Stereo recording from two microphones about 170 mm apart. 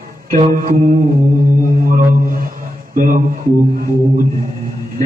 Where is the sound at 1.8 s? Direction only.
55° right (ahead or behind).